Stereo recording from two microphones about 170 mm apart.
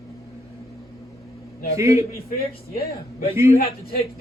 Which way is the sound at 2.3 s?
60° left (ahead or behind).